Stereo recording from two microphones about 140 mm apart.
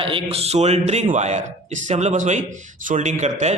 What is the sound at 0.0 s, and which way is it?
Speech, 40° right (ahead or behind).